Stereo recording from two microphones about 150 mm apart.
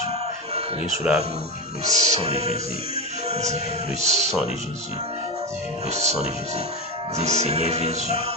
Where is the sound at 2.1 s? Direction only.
45° right (ahead or behind).